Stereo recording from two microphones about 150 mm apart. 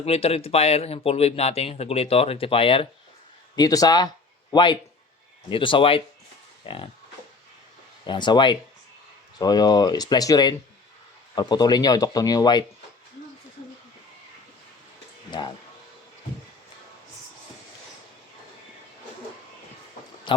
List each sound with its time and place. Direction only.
0.0 s speech: 40° left (ahead or behind)
3.5 s speech: 25° left (ahead or behind)
8.0 s speech: 30° left (ahead or behind)
15.3 s music: 30° left (ahead or behind)
20.3 s speech: 35° left (ahead or behind)